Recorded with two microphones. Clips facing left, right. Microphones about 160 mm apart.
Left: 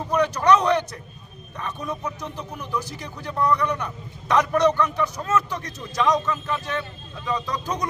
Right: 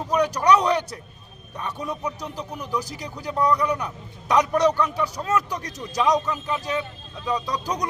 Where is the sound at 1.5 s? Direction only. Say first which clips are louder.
Even; 10° right (ahead or behind).